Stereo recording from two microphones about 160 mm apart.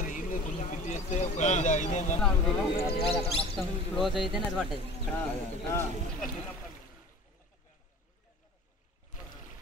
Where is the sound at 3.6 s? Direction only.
Centre (ahead or behind).